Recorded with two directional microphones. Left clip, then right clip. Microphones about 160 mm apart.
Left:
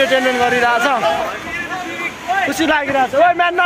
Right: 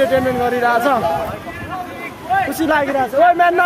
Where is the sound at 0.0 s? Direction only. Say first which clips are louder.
Left 2 dB; 10° right (ahead or behind).